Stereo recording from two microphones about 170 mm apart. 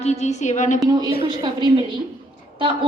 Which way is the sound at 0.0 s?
40° left (ahead or behind).